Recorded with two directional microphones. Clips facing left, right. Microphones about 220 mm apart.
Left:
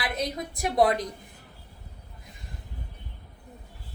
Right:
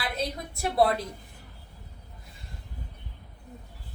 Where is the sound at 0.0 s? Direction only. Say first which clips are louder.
Left 2 dB; 15° left (ahead or behind).